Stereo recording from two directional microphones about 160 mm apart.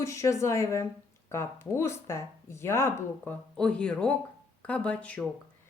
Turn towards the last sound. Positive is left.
turn(degrees=5)  # may be behind; listen again after turning